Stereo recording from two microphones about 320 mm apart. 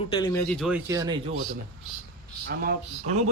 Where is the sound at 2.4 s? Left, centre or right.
Right.